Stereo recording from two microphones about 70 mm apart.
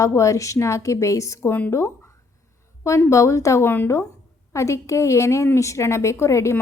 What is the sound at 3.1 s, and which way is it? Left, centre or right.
Speech, left.